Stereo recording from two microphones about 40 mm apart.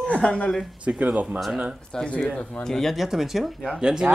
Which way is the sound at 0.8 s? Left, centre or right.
Right.